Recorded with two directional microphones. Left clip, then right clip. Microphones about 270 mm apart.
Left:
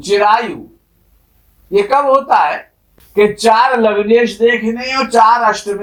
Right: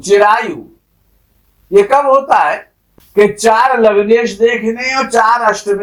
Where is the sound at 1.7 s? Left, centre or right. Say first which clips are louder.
Right 2 dB; right.